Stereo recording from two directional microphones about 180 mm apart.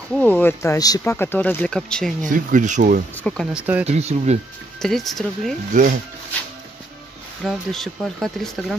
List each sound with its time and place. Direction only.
0.1 s speech: 10° left (ahead or behind)
2.2 s speech: 45° right (ahead or behind)
3.2 s speech: 5° left (ahead or behind)
3.5 s speech: 10° right (ahead or behind)
3.8 s speech: 35° right (ahead or behind)
4.8 s speech: centre (ahead or behind)
5.7 s speech: 45° right (ahead or behind)
7.4 s speech: centre (ahead or behind)